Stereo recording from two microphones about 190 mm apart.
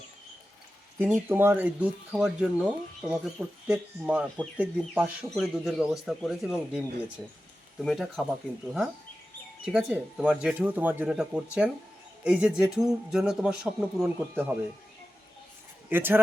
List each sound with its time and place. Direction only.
1.3 s speech: 10° right (ahead or behind)
15.9 s speech: 10° right (ahead or behind)